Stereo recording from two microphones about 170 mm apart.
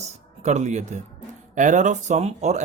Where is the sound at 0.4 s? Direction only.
40° right (ahead or behind).